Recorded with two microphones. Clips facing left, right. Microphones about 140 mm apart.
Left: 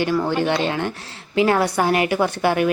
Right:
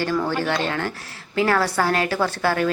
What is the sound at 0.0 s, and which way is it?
A woman's voice, 15° left (ahead or behind).